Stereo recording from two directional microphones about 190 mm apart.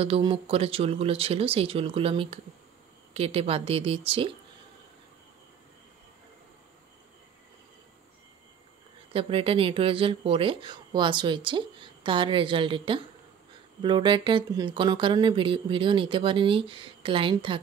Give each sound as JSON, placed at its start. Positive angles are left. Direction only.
{"t": 0.0, "sound": "speech", "side_deg": -30}
{"t": 9.1, "sound": "speech", "side_deg": -30}